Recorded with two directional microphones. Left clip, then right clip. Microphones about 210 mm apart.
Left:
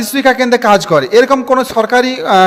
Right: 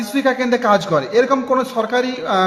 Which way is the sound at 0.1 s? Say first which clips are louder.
Left 7 dB; 45° left (ahead or behind).